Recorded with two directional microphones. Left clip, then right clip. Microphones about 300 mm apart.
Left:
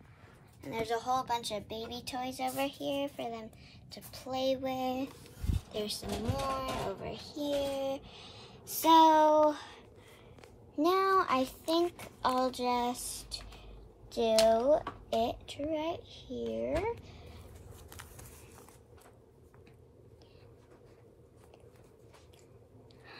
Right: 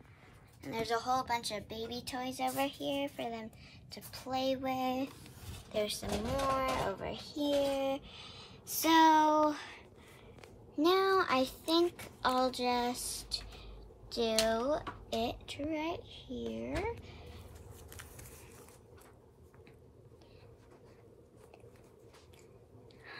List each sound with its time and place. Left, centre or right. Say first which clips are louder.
0.6 s a woman's voice: left 1 dB; centre
9.2 s child singing: left 4 dB; centre
11.0 s child singing: left 4 dB; centre
11.3 s a woman's voice: even; centre
13.3 s a sound: right 3 dB; centre
14.1 s a woman's voice: left 5 dB; centre
17.8 s a sound: left 1 dB; centre